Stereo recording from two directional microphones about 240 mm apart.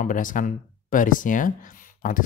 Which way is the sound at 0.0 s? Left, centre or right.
Left.